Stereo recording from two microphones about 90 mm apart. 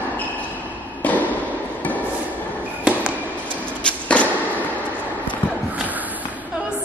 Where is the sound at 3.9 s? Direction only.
10° left (ahead or behind).